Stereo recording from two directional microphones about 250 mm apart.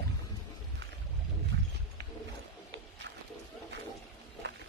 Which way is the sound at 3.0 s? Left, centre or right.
Right.